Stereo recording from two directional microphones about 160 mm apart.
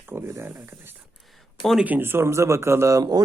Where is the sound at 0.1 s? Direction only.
15° right (ahead or behind).